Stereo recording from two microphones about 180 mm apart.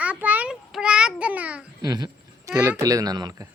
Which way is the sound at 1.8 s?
20° right (ahead or behind).